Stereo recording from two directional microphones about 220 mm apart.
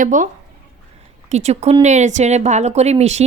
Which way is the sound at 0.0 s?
35° right (ahead or behind).